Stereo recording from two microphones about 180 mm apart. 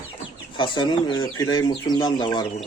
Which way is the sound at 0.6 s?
25° left (ahead or behind).